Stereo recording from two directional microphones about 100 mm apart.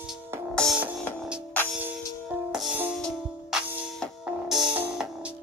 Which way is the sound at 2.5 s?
5° right (ahead or behind).